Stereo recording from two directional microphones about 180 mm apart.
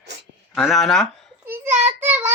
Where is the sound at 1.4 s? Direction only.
10° right (ahead or behind).